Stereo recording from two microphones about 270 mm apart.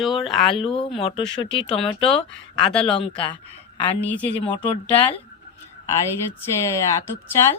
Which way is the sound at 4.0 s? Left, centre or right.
Centre.